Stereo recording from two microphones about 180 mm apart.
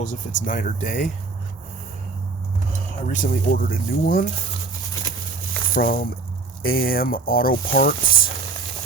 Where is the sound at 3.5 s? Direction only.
50° left (ahead or behind).